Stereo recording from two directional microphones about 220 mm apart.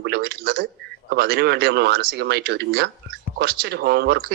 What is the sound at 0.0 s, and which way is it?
Speech, 45° right (ahead or behind).